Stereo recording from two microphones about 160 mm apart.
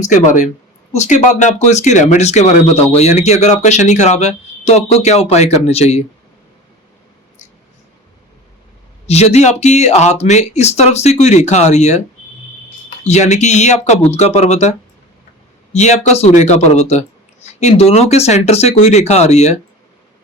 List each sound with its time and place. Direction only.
0.0 s speech: 45° left (ahead or behind)
9.0 s speech: 40° left (ahead or behind)
13.1 s speech: 45° left (ahead or behind)